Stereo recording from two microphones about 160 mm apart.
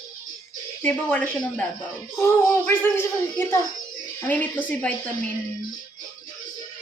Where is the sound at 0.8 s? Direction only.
10° left (ahead or behind).